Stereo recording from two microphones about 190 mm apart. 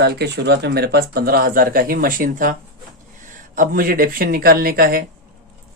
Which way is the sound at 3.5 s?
50° right (ahead or behind).